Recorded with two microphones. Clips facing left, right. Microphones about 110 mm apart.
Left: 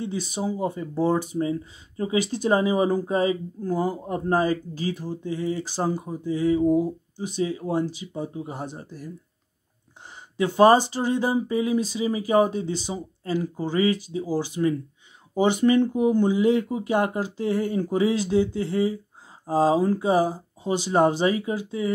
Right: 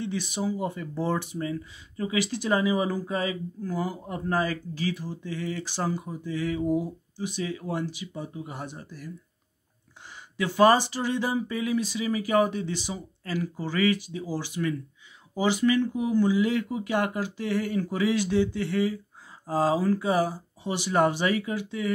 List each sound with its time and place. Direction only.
0.4 s speech: 25° left (ahead or behind)
4.9 s a sound: 45° left (ahead or behind)
5.2 s speech: 20° left (ahead or behind)
10.6 s speech: 25° left (ahead or behind)
15.7 s speech: 30° left (ahead or behind)
16.2 s speech: 40° left (ahead or behind)
19.4 s speech: 15° left (ahead or behind)